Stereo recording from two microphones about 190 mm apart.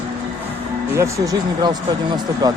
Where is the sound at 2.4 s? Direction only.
20° right (ahead or behind).